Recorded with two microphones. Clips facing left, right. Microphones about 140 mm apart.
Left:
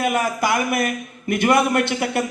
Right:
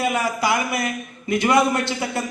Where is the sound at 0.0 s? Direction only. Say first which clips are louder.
Left 1 dB; 50° left (ahead or behind).